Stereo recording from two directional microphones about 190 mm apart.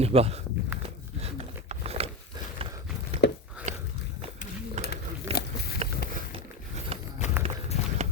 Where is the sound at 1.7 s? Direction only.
35° right (ahead or behind).